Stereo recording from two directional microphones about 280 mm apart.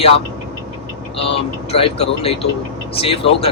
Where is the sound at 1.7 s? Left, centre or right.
Centre.